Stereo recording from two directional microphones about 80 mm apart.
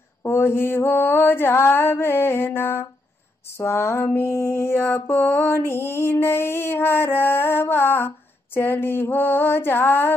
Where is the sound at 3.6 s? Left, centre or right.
Left.